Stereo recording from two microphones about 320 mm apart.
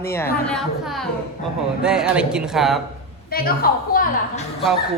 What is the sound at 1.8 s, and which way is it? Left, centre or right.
Speech, centre.